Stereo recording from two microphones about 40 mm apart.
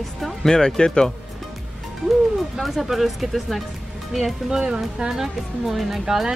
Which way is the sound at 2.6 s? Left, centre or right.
Centre.